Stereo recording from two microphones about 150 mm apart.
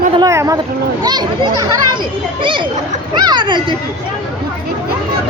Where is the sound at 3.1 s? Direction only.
30° right (ahead or behind).